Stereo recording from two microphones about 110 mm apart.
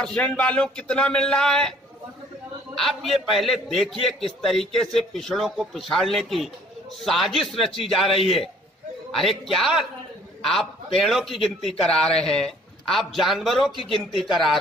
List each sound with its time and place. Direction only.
0.0 s speech: 10° left (ahead or behind)
2.7 s a man's voice: centre (ahead or behind)
8.1 s a man's voice: 60° left (ahead or behind)
9.2 s a man's voice: centre (ahead or behind)